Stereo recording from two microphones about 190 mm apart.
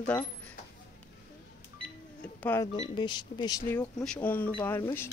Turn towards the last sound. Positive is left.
turn(degrees=10)  # may be behind; listen again after turning